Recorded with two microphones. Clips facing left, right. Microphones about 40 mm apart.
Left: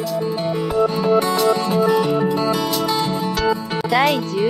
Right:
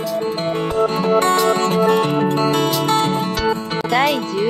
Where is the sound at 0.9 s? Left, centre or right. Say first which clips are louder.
Right 2 dB; right.